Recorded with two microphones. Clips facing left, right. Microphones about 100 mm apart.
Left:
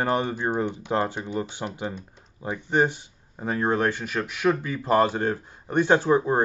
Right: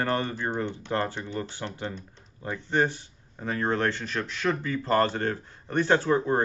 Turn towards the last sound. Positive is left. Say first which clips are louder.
# left 3 dB
turn(degrees=15)  # may be behind; listen again after turning